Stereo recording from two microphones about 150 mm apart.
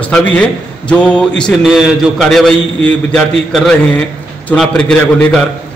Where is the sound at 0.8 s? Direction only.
5° left (ahead or behind).